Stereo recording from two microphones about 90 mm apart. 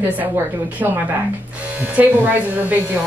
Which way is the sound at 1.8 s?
20° right (ahead or behind).